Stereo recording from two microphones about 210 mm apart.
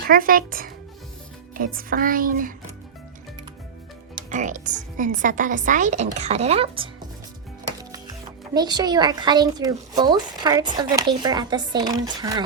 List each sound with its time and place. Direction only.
0.1 s a woman's voice: 40° right (ahead or behind)
4.3 s a woman's voice: 35° right (ahead or behind)
7.8 s music: 20° right (ahead or behind)
8.5 s speech: 20° right (ahead or behind)